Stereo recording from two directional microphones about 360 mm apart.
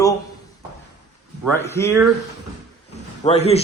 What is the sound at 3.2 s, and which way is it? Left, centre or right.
Speech, centre.